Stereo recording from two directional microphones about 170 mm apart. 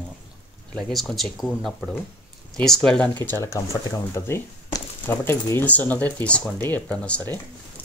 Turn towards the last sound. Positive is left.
turn(degrees=10)  # may be behind; listen again after turning